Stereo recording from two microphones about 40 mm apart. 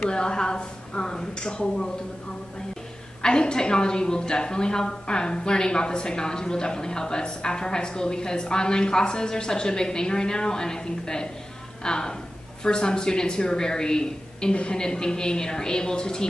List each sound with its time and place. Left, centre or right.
0.0 s a woman's voice: left
3.2 s a woman's voice: left